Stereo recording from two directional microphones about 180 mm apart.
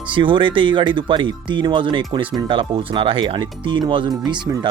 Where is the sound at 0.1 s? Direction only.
25° right (ahead or behind).